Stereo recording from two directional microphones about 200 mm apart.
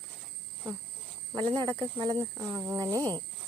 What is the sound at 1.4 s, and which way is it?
Speech, 25° right (ahead or behind).